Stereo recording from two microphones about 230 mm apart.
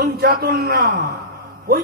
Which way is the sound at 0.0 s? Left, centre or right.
Right.